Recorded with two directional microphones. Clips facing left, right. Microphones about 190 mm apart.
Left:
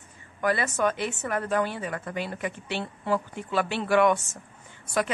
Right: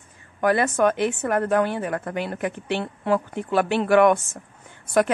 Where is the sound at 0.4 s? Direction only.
50° right (ahead or behind).